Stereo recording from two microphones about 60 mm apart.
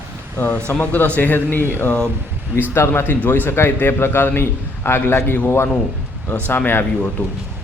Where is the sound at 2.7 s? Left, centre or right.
Left.